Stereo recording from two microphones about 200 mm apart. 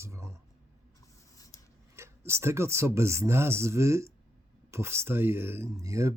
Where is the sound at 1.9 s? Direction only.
15° right (ahead or behind).